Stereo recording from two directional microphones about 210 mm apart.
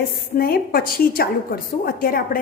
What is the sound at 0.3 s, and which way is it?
A woman's voice, 45° left (ahead or behind).